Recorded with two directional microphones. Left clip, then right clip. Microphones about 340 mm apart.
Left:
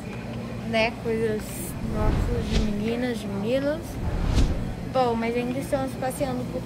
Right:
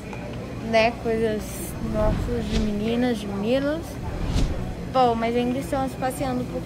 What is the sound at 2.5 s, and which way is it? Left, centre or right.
A woman's voice, centre.